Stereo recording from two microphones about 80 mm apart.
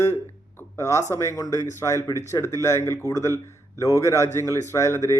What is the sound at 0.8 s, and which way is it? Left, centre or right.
Speech, left.